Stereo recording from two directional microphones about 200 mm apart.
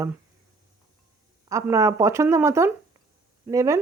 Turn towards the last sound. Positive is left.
turn(degrees=-15)  # may be behind; listen again after turning